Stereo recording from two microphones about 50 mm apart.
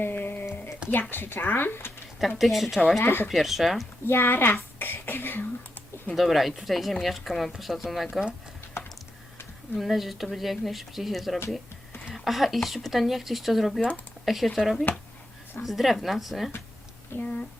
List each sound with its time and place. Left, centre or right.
0.0 s a sound: left
1.1 s speech: left
2.4 s speech: centre
3.0 s speech: left
3.2 s speech: centre
4.0 s speech: left
4.8 s beatboxing: left
6.1 s speech: centre
8.8 s typing: left
9.7 s speech: centre
17.1 s speech: left